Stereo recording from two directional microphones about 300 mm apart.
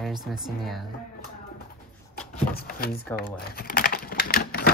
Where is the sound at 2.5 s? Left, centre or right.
Left.